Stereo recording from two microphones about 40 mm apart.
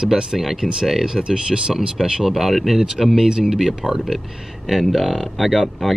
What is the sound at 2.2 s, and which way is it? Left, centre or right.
Speech, centre.